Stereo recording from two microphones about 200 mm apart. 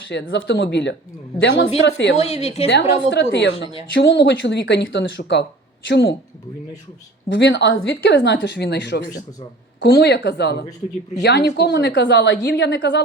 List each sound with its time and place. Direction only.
0.1 s speech: 65° left (ahead or behind)
2.1 s a woman's voice: 30° left (ahead or behind)
3.1 s speech: 60° left (ahead or behind)
7.3 s speech: 65° left (ahead or behind)